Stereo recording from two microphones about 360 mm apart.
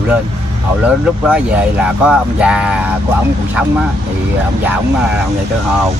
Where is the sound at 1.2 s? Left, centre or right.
Centre.